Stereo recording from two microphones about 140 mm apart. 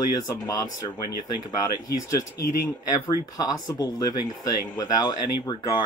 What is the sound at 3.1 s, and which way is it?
Speech, 25° left (ahead or behind).